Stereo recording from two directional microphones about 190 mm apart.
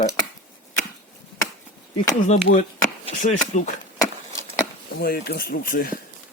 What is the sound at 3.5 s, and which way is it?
Speech, 40° left (ahead or behind).